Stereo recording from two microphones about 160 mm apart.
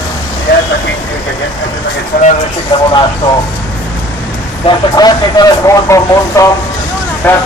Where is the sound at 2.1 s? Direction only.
65° left (ahead or behind).